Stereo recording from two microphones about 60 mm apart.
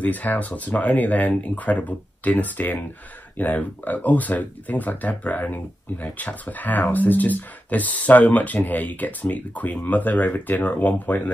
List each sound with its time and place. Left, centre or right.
0.0 s speech: left